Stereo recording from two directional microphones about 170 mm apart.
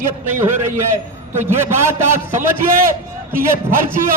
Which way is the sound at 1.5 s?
15° right (ahead or behind).